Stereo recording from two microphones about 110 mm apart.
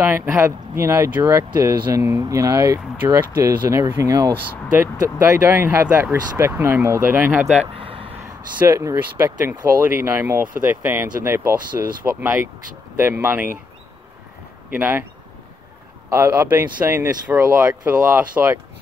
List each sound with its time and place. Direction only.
0.0 s speech: 20° right (ahead or behind)
7.7 s a sound: 55° right (ahead or behind)
8.5 s speech: 25° right (ahead or behind)
14.7 s speech: 20° right (ahead or behind)
16.1 s speech: 25° right (ahead or behind)